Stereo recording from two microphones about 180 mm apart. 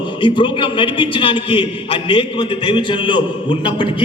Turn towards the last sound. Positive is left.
turn(degrees=25)  # may be behind; listen again after turning